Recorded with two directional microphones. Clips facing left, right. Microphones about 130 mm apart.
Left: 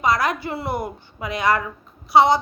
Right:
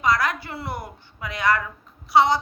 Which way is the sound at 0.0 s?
15° left (ahead or behind).